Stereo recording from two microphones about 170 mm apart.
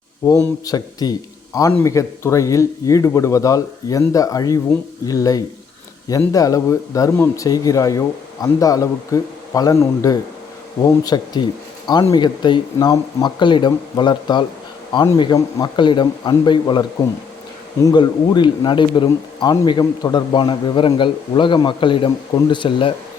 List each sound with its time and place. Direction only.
0.6 s speech: 20° left (ahead or behind)
17.8 s speech: 25° left (ahead or behind)